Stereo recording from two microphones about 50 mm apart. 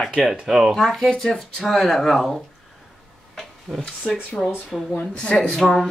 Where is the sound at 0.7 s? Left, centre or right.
Centre.